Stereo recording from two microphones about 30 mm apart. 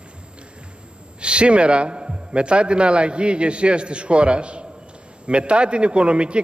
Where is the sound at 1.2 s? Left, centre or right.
Right.